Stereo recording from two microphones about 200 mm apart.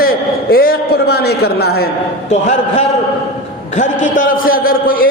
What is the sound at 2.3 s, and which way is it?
A man's voice, 35° left (ahead or behind).